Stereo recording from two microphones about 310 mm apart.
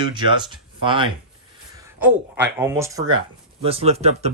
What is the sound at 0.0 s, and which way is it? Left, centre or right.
Speech, centre.